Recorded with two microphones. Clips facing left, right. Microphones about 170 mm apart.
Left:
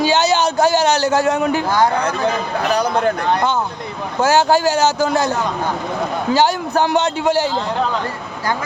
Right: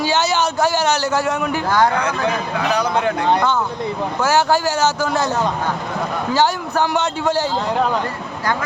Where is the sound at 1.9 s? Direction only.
35° left (ahead or behind).